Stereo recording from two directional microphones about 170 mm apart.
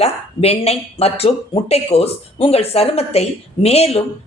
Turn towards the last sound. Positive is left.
turn(degrees=35)  # may be behind; listen again after turning